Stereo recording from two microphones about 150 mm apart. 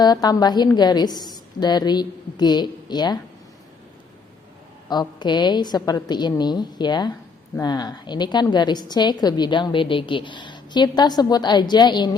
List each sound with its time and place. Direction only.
0.0 s a woman's voice: 25° left (ahead or behind)
4.9 s a woman's voice: 30° left (ahead or behind)